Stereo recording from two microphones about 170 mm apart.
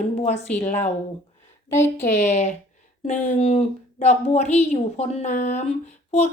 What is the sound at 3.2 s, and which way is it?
A woman's voice, 40° left (ahead or behind).